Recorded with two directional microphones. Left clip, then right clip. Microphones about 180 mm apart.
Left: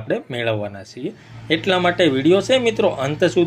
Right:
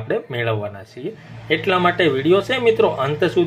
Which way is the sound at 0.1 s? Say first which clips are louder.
Even; 40° left (ahead or behind).